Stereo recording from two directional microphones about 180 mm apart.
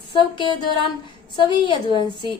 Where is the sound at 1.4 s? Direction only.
25° left (ahead or behind).